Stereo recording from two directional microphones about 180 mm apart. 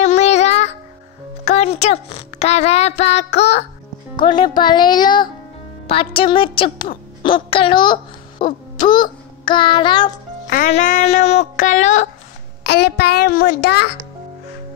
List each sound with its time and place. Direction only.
0.0 s child singing: 40° left (ahead or behind)
1.4 s speech: 40° left (ahead or behind)
4.2 s a child's voice: 25° left (ahead or behind)
10.7 s speech: 45° left (ahead or behind)
12.6 s a child's voice: 65° left (ahead or behind)